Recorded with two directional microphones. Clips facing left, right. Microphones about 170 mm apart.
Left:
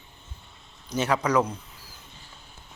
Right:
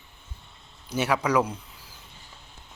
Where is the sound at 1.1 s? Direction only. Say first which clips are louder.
Even; 5° right (ahead or behind).